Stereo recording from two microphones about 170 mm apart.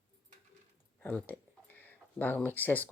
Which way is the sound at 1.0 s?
10° left (ahead or behind).